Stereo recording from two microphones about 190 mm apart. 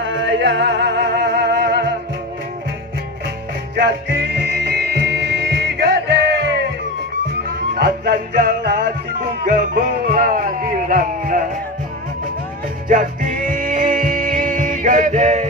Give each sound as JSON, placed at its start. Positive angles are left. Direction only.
{"t": 0.0, "sound": "music", "side_deg": -70}
{"t": 3.7, "sound": "music", "side_deg": -55}
{"t": 7.8, "sound": "music", "side_deg": -55}
{"t": 10.0, "sound": "music", "side_deg": -50}
{"t": 12.8, "sound": "music", "side_deg": -45}